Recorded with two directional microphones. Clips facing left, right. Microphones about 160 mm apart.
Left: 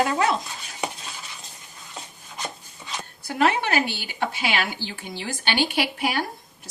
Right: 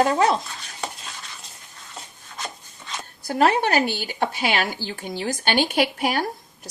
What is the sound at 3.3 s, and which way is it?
Speech, 40° right (ahead or behind).